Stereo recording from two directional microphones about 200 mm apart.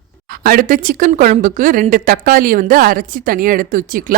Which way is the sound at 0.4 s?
45° right (ahead or behind).